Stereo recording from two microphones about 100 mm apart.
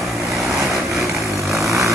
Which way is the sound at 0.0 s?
Centre (ahead or behind).